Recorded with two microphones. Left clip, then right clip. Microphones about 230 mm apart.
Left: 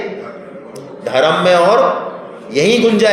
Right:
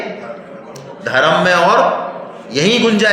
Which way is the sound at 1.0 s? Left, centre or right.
Right.